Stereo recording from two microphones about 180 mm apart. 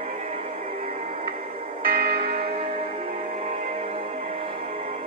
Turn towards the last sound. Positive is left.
turn(degrees=-35)  # may be behind; listen again after turning